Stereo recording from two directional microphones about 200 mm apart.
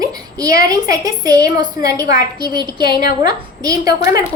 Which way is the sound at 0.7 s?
20° right (ahead or behind).